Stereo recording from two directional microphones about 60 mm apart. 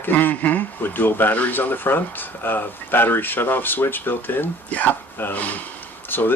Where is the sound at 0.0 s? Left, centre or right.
Left.